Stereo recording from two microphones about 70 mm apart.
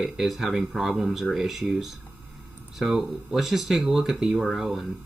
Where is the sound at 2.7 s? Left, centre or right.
Centre.